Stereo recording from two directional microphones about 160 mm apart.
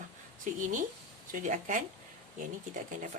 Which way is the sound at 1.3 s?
55° right (ahead or behind).